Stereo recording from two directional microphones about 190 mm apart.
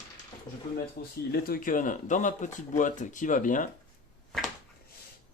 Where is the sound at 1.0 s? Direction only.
50° left (ahead or behind).